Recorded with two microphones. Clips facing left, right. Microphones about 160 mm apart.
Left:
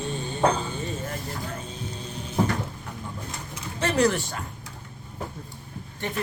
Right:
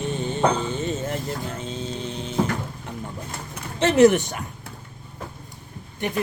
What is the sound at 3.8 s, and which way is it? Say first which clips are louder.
Speech: right 7 dB; 20° right (ahead or behind).